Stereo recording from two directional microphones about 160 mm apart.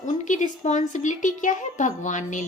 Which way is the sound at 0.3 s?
50° left (ahead or behind).